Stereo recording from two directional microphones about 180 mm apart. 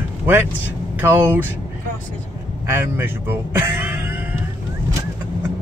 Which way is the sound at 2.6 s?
10° right (ahead or behind).